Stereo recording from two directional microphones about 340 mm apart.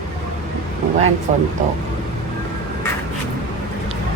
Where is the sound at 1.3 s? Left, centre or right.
Right.